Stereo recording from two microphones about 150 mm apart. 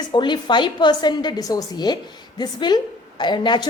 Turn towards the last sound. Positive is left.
turn(degrees=30)  # may be behind; listen again after turning